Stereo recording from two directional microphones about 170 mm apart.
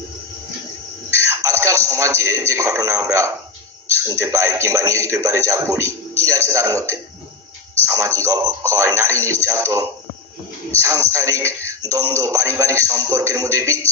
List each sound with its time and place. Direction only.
1.3 s a sound: 15° right (ahead or behind)
4.0 s music: 15° right (ahead or behind)
6.5 s a man's voice: 20° right (ahead or behind)
7.8 s music: 15° right (ahead or behind)